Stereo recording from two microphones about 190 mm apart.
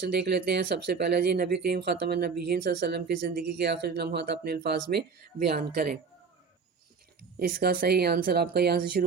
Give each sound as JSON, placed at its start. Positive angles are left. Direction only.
{"t": 0.1, "sound": "speech", "side_deg": -60}
{"t": 7.3, "sound": "speech", "side_deg": -55}